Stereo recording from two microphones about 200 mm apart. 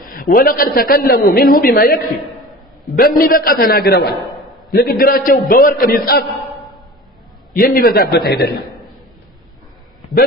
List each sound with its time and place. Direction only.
0.0 s a man's voice: 45° left (ahead or behind)
3.0 s a man's voice: 45° left (ahead or behind)
7.5 s a man's voice: 45° left (ahead or behind)